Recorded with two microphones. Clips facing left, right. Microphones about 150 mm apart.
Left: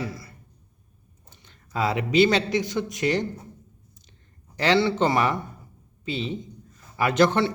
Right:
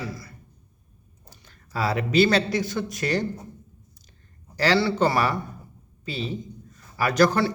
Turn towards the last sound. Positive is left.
turn(degrees=25)  # may be behind; listen again after turning